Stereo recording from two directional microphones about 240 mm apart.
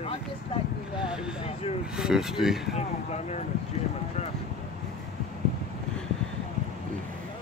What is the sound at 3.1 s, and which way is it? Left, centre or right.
Speech, left.